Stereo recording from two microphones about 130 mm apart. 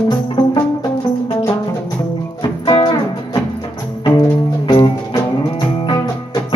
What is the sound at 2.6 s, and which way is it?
Music, 35° left (ahead or behind).